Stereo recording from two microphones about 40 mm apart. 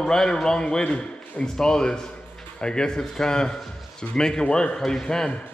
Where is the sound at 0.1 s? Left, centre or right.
Centre.